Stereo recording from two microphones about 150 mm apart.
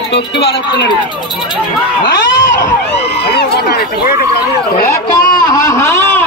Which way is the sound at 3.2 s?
90° left.